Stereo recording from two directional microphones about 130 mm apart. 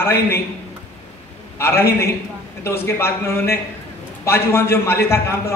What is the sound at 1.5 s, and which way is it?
A man's voice, 20° left (ahead or behind).